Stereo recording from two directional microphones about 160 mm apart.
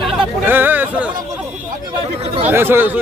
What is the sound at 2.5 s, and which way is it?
Speech, 15° right (ahead or behind).